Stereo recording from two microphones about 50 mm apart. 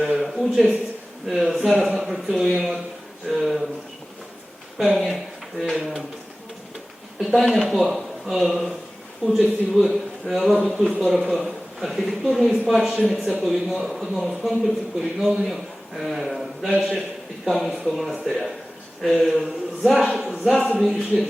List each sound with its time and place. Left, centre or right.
0.0 s a man's voice: centre
4.8 s a man's voice: centre
5.1 s a sound: centre
5.7 s speech: centre
7.2 s a man's voice: centre
12.0 s a man's voice: centre
16.7 s speech: centre
17.4 s a man's voice: centre